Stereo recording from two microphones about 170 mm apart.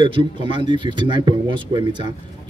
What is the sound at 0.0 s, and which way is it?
Speech, 30° right (ahead or behind).